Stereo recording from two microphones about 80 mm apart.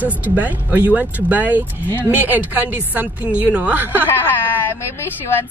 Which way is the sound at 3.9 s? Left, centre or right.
Left.